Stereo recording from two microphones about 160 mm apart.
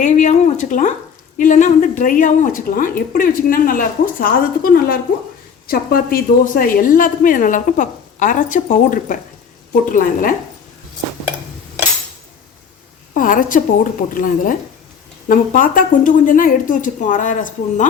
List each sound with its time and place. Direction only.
0.0 s a sound: 50° left (ahead or behind)
1.4 s a woman's voice: 50° left (ahead or behind)
13.1 s a woman's voice: 55° left (ahead or behind)